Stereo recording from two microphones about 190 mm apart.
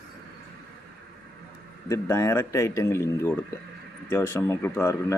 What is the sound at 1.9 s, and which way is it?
Speech, 15° left (ahead or behind).